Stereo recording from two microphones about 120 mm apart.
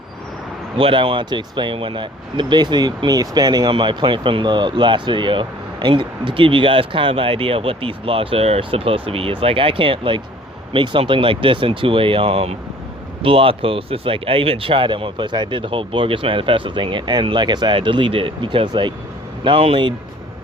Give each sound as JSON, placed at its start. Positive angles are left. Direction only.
{"t": 0.8, "sound": "speech", "side_deg": -50}